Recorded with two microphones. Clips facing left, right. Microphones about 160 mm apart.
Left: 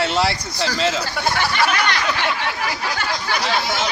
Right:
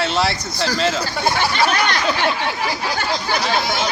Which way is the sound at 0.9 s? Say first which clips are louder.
Right 2 dB; 15° right (ahead or behind).